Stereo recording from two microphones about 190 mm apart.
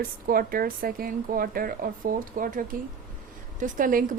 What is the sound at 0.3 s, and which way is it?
A woman's voice, 50° right (ahead or behind).